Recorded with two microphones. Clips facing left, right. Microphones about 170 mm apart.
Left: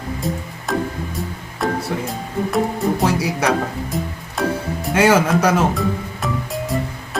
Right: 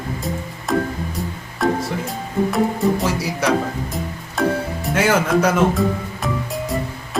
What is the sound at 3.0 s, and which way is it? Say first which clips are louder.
Music: left 3 dB; 65° left (ahead or behind).